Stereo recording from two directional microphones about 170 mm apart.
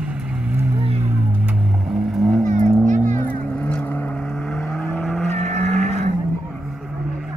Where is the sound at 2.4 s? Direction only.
45° right (ahead or behind).